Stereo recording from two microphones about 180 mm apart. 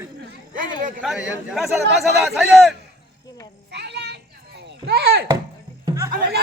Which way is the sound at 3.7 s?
70° right (ahead or behind).